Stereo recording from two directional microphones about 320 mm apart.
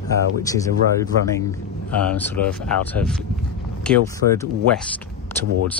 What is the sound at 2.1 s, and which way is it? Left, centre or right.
Speech, centre.